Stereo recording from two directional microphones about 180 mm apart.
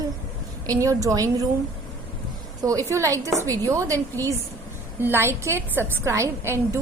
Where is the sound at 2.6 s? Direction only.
20° right (ahead or behind).